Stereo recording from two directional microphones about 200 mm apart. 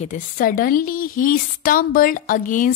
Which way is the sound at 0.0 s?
40° left (ahead or behind).